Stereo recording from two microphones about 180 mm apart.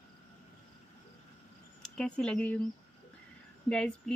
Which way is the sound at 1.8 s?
5° left (ahead or behind).